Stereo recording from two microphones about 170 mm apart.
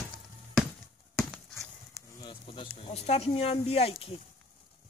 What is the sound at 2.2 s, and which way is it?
Insect, 30° left (ahead or behind).